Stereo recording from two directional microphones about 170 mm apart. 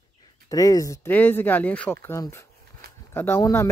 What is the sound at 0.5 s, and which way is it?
Speech, 20° left (ahead or behind).